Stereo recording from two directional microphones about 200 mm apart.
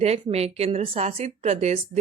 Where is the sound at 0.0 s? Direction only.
30° right (ahead or behind).